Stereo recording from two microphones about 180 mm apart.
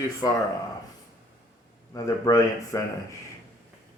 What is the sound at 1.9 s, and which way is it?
Speech, 20° left (ahead or behind).